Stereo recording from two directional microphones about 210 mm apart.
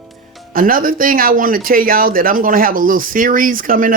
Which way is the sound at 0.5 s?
40° right (ahead or behind).